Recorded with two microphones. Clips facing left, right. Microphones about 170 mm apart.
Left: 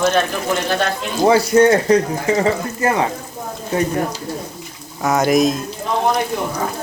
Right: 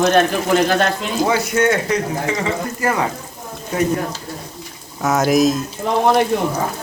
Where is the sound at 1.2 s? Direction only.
35° left (ahead or behind).